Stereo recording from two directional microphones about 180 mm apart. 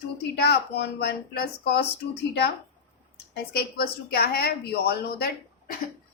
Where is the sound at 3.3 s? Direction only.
60° left (ahead or behind).